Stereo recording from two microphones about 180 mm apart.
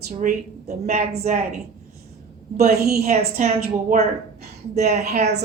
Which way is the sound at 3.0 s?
40° right (ahead or behind).